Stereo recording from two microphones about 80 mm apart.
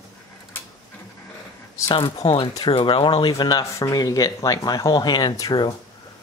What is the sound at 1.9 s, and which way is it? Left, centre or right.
Speech, left.